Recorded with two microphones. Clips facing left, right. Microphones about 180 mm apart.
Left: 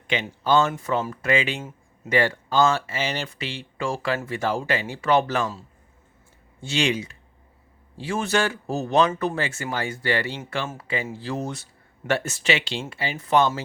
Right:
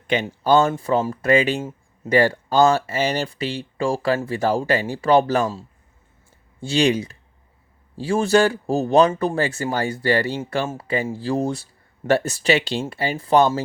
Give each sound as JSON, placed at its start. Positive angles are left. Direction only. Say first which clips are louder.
{"t": 0.1, "sound": "speech", "louder": "right 4 dB", "side_deg": -40}